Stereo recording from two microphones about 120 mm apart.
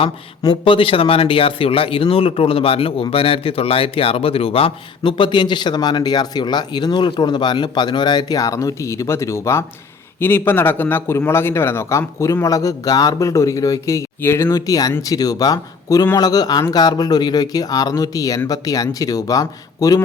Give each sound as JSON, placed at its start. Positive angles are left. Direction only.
{"t": 0.0, "sound": "a man's voice", "side_deg": 45}